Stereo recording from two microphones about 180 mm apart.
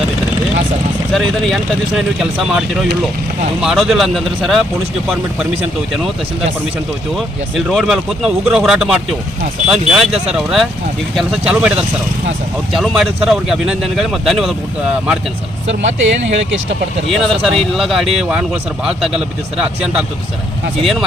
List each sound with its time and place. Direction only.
1.1 s speech: centre (ahead or behind)
7.5 s speech: centre (ahead or behind)
12.7 s speech: centre (ahead or behind)
15.6 s speech: 40° right (ahead or behind)
17.1 s speech: centre (ahead or behind)